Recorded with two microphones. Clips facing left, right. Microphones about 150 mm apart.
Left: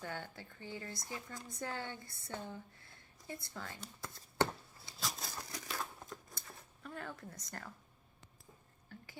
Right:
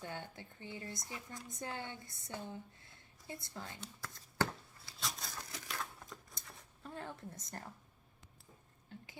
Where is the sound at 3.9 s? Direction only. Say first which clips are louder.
Left 2 dB; 20° left (ahead or behind).